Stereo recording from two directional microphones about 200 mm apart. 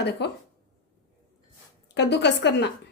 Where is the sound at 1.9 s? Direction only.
60° left (ahead or behind).